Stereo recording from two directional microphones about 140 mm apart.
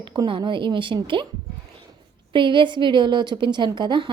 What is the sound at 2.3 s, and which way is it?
A woman's voice, 35° right (ahead or behind).